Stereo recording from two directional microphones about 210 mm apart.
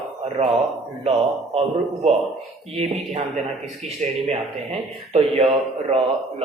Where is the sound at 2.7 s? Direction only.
30° right (ahead or behind).